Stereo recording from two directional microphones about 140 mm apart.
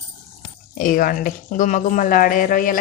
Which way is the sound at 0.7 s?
85° left.